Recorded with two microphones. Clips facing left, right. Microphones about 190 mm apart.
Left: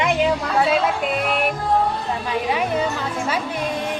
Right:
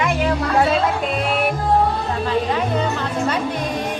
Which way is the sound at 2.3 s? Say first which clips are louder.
Right 2 dB; 10° left (ahead or behind).